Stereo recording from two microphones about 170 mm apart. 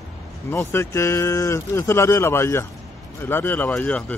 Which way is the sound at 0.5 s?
15° left (ahead or behind).